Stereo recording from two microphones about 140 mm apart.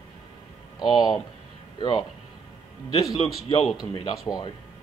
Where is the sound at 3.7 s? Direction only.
35° left (ahead or behind).